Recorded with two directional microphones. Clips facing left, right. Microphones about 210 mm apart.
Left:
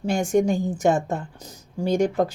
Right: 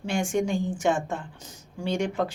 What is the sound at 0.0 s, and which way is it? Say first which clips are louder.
Speech: left 5 dB; 40° left (ahead or behind).